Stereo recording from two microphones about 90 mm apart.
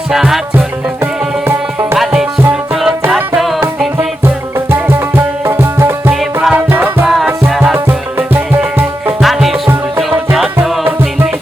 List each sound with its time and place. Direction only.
0.1 s music: 5° right (ahead or behind)
1.5 s music: 30° right (ahead or behind)
2.5 s music: 5° right (ahead or behind)
4.7 s music: 25° right (ahead or behind)
7.0 s music: centre (ahead or behind)
7.6 s music: 20° right (ahead or behind)
9.2 s music: 5° right (ahead or behind)
10.6 s music: 20° right (ahead or behind)